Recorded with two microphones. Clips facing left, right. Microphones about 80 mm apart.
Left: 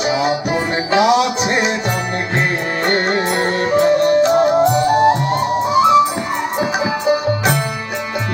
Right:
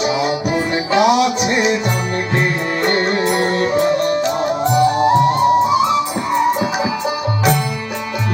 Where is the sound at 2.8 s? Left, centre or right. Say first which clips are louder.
Right 1 dB; left.